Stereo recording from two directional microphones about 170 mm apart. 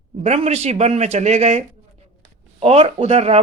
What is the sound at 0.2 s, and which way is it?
Speech, 40° right (ahead or behind).